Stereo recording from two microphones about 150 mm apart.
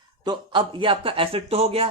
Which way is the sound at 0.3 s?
35° right (ahead or behind).